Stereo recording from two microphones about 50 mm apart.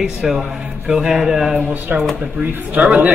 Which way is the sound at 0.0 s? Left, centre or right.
Centre.